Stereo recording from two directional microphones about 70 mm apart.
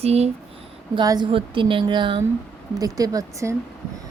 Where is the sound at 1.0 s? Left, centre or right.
Right.